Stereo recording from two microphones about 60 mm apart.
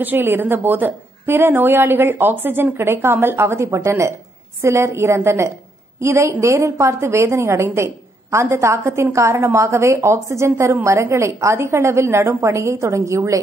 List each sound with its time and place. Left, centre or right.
0.0 s a woman's voice: right